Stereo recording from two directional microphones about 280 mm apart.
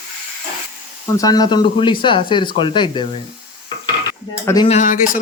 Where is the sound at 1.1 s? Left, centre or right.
Centre.